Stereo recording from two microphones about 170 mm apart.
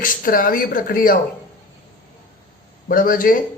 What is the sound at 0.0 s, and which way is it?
A man's voice, 55° left (ahead or behind).